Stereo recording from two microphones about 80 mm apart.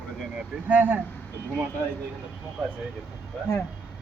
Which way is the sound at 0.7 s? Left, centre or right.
Right.